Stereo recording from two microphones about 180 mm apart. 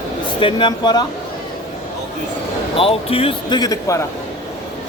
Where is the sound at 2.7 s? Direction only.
30° left (ahead or behind).